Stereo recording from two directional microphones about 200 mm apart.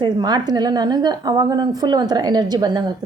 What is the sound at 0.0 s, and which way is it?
A woman's voice, 20° right (ahead or behind).